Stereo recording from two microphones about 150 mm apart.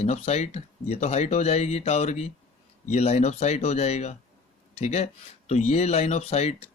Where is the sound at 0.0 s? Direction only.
45° left (ahead or behind).